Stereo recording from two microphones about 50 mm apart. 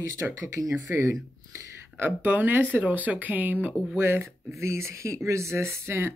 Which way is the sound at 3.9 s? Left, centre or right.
Right.